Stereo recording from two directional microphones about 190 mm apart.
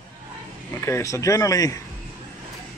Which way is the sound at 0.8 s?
15° left (ahead or behind).